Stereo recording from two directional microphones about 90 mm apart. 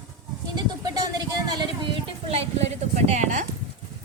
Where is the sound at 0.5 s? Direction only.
45° right (ahead or behind); by 2.4 s 65° right (ahead or behind).